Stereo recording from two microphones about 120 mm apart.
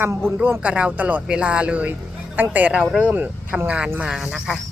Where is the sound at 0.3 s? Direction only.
15° right (ahead or behind).